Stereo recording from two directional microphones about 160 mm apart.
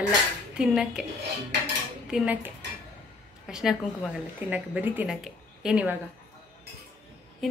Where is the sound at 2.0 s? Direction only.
5° right (ahead or behind).